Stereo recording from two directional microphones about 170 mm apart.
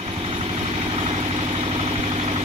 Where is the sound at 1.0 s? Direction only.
35° right (ahead or behind).